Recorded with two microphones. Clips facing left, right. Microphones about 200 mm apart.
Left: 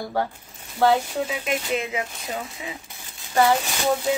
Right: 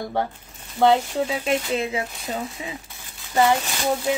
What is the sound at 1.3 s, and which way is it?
Speech, 35° right (ahead or behind).